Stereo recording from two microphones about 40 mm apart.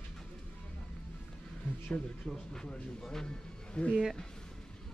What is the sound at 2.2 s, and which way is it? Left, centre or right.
Speech, left.